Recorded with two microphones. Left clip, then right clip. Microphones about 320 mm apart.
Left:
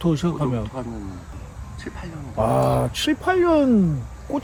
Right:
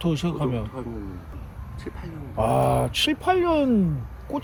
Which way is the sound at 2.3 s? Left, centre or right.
Centre.